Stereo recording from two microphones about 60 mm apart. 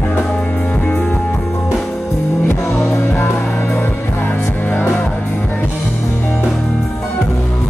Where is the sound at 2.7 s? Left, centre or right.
Left.